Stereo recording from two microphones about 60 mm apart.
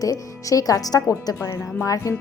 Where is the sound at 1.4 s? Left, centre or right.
Left.